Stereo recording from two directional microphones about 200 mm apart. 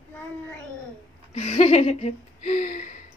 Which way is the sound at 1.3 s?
35° left (ahead or behind).